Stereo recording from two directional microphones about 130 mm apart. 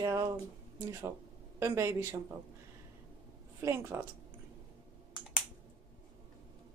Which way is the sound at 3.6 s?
20° right (ahead or behind).